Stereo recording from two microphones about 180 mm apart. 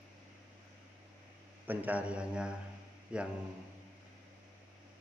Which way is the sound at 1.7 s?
10° right (ahead or behind).